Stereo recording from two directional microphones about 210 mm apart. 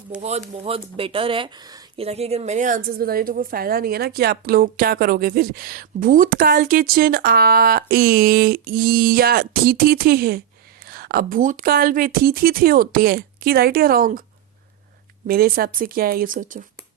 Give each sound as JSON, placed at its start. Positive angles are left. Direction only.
{"t": 0.2, "sound": "speech", "side_deg": -30}
{"t": 2.0, "sound": "a woman's voice", "side_deg": -30}
{"t": 15.3, "sound": "a woman's voice", "side_deg": -45}